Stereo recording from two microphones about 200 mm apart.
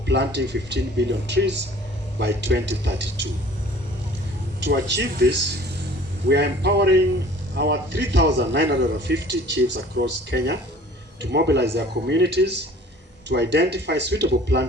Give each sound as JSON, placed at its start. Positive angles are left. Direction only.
{"t": 0.0, "sound": "a man's voice", "side_deg": -60}
{"t": 4.6, "sound": "a man's voice", "side_deg": -60}